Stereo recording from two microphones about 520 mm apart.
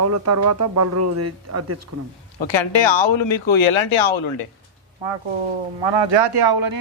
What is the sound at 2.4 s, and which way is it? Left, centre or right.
Speech, left.